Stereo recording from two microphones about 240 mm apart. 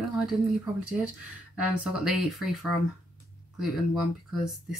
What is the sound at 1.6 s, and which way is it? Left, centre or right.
Speech, centre.